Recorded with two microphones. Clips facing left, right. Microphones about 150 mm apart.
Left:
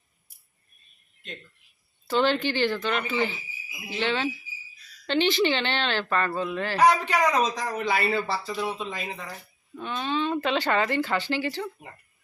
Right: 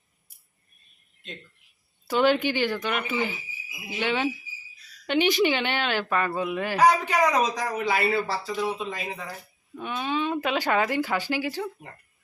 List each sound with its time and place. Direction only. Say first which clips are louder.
2.0 s speech: right 2 dB; 10° right (ahead or behind)